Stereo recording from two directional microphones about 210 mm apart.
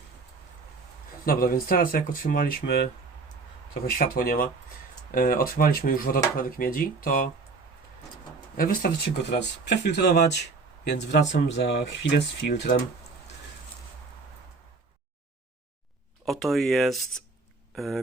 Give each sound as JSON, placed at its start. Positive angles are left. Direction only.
{"t": 1.2, "sound": "speech", "side_deg": 45}
{"t": 8.5, "sound": "speech", "side_deg": 45}
{"t": 16.2, "sound": "speech", "side_deg": 0}